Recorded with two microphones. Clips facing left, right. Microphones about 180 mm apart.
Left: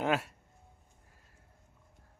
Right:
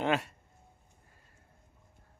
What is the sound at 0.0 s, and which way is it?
Speech, 5° left (ahead or behind).